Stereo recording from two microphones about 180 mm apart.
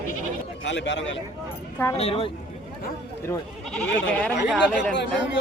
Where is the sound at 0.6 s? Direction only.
90° left.